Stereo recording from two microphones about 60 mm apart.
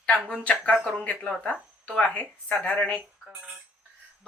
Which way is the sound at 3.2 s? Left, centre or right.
Centre.